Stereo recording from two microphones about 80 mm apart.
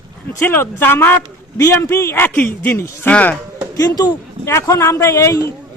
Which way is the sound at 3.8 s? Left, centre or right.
Left.